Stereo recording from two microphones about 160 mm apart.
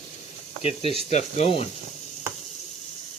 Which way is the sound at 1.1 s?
45° left (ahead or behind).